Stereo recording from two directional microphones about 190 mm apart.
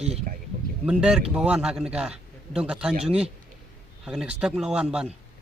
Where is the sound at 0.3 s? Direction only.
45° right (ahead or behind).